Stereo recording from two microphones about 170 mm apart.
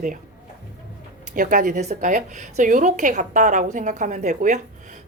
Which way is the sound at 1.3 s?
50° right (ahead or behind).